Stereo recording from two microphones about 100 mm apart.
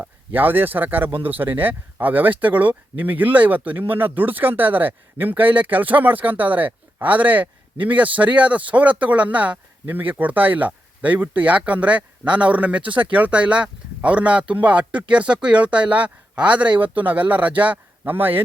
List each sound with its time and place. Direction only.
0.0 s speech: 20° right (ahead or behind)